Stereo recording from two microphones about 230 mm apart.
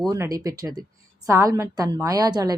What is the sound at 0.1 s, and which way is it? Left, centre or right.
Speech, centre.